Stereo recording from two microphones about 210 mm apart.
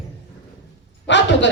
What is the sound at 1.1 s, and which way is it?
Speech, 60° left (ahead or behind).